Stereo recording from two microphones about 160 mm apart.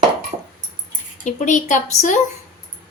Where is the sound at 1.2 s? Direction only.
50° left (ahead or behind).